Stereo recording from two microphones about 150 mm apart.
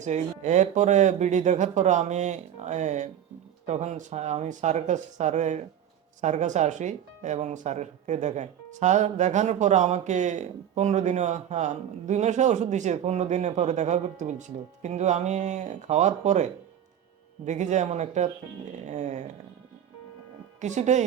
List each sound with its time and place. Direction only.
0.0 s speech: 50° right (ahead or behind)
20.6 s speech: 50° right (ahead or behind)